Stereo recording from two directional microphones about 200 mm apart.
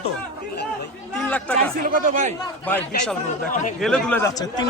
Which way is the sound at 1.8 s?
40° right (ahead or behind).